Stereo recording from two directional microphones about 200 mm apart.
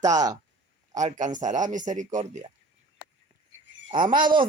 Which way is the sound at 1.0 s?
40° right (ahead or behind).